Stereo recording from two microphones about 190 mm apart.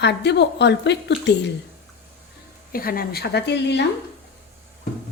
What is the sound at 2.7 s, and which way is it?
Speech, 50° left (ahead or behind).